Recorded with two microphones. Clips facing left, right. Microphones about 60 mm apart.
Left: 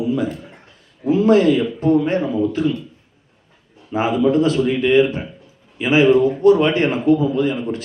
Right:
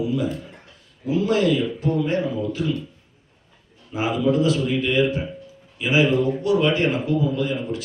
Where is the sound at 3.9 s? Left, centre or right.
Left.